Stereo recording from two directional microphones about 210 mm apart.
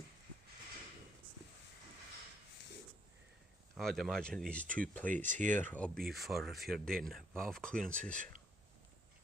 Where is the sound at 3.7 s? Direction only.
Centre (ahead or behind).